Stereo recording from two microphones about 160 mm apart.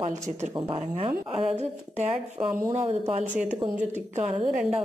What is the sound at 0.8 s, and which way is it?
A woman's voice, 40° right (ahead or behind).